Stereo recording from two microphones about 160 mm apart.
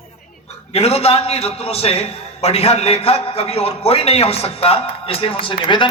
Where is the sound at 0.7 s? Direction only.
40° left (ahead or behind).